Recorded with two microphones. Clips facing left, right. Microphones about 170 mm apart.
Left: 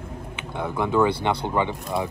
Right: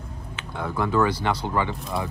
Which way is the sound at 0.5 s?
20° left (ahead or behind).